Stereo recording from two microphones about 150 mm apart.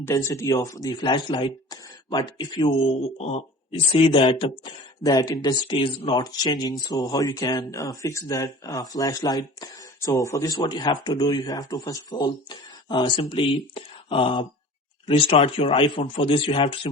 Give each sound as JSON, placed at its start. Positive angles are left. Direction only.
{"t": 0.0, "sound": "a man's voice", "side_deg": 20}